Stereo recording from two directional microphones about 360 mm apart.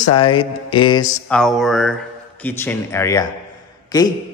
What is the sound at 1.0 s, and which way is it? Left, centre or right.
A man's voice, centre.